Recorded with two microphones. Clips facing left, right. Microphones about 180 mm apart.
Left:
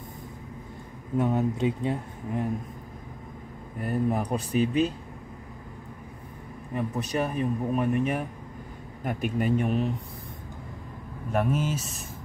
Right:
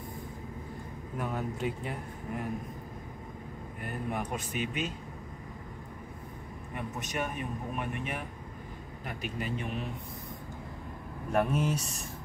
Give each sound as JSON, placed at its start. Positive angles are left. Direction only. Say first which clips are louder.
{"t": 1.1, "sound": "speech", "louder": "left 10 dB", "side_deg": 25}
{"t": 3.8, "sound": "speech", "louder": "left 9 dB", "side_deg": 35}
{"t": 6.7, "sound": "a man's voice", "louder": "left 8 dB", "side_deg": 35}
{"t": 11.3, "sound": "speech", "louder": "left 2 dB", "side_deg": 0}